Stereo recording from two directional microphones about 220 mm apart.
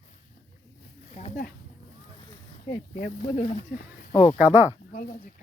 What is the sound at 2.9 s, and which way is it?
Speech, 50° left (ahead or behind).